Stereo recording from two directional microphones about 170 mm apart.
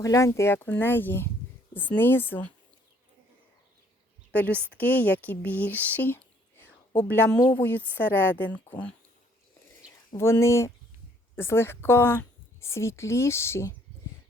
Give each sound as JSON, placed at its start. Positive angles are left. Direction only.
{"t": 0.0, "sound": "speech", "side_deg": 20}
{"t": 4.3, "sound": "speech", "side_deg": 10}
{"t": 9.8, "sound": "a sound", "side_deg": -5}
{"t": 10.2, "sound": "speech", "side_deg": 15}